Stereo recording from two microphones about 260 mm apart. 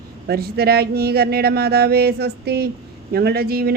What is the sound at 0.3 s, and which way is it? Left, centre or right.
Speech, right.